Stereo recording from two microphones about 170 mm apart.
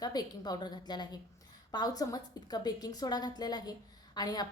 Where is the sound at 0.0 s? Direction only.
25° left (ahead or behind).